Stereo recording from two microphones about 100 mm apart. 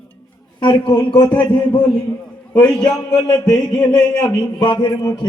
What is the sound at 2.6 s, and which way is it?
Speech, 10° left (ahead or behind).